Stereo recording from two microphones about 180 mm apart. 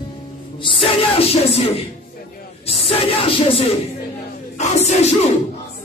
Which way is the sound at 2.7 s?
35° left (ahead or behind).